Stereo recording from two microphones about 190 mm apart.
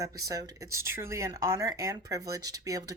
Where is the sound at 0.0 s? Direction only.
15° right (ahead or behind).